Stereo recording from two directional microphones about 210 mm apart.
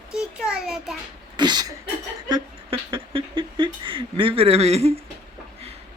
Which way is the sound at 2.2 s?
20° right (ahead or behind).